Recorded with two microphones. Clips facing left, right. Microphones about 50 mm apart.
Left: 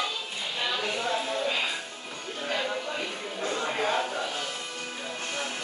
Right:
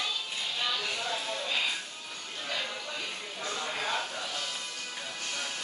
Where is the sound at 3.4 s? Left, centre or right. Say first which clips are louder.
Left 6 dB; left.